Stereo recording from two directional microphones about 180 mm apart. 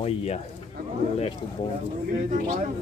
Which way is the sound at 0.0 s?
35° left (ahead or behind).